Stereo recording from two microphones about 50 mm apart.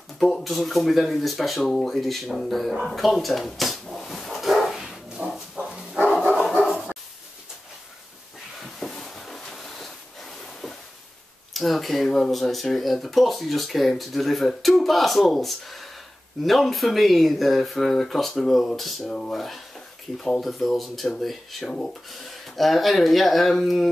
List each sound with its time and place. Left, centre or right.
0.2 s speech: centre
2.8 s dog: centre
5.2 s dog: right
5.6 s dog: centre
6.6 s dog: centre
8.7 s a sound: centre
11.5 s a sound: centre
12.1 s speech: centre
18.8 s speech: centre
19.0 s speech: centre
19.3 s speech: centre
22.1 s speech: centre